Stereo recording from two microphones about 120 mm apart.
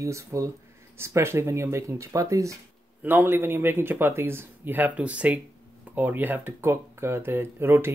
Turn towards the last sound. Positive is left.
turn(degrees=-20)  # may be behind; listen again after turning